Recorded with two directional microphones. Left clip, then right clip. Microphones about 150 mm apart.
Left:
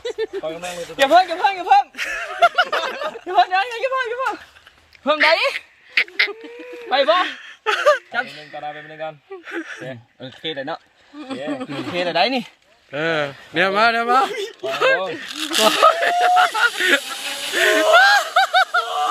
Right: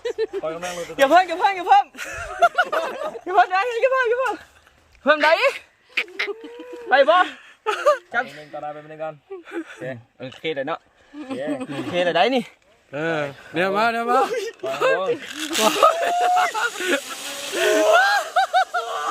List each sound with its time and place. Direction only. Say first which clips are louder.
0.4 s a man's voice: even; 10° left (ahead or behind)
2.0 s speech: left 2 dB; 10° right (ahead or behind)
2.6 s a sound: left 2 dB; 15° right (ahead or behind)
3.3 s a man's voice: left 1 dB; 5° right (ahead or behind)
5.0 s a sound: even; 5° right (ahead or behind)
6.8 s speech: right 1 dB; centre (ahead or behind)
8.2 s a man's voice: left 1 dB; 15° left (ahead or behind)
9.5 s a man's voice: left 4 dB; centre (ahead or behind)
9.8 s a man's voice: right 1 dB; 10° left (ahead or behind)
11.2 s speech: even; 20° left (ahead or behind)
11.9 s a man's voice: right 1 dB; centre (ahead or behind)